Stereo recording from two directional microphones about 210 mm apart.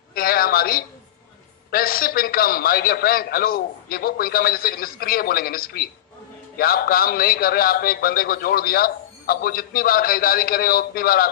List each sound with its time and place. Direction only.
0.1 s a woman's voice: 45° left (ahead or behind)